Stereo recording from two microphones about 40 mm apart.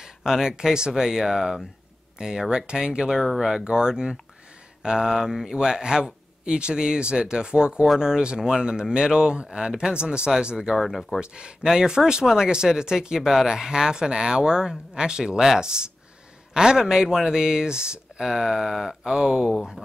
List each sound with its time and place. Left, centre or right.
0.0 s speech: centre
3.6 s speech: centre
10.8 s speech: centre
11.1 s speech: right